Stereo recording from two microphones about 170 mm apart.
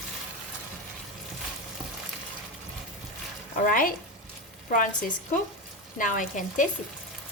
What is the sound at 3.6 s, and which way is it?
Speech, 55° left (ahead or behind).